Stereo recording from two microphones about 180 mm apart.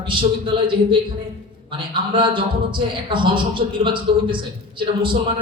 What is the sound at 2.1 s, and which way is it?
A man's voice, 25° right (ahead or behind).